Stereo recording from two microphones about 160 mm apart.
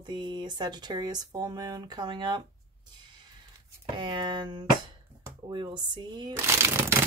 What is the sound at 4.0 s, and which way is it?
Speech, 30° right (ahead or behind).